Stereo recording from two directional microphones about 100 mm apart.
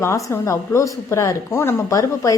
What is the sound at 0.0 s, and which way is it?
A woman's voice, 30° left (ahead or behind).